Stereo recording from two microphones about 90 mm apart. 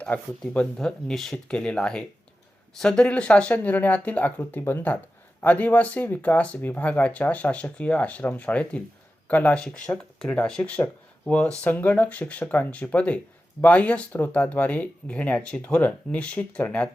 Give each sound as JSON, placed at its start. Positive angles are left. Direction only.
{"t": 0.0, "sound": "speech", "side_deg": 15}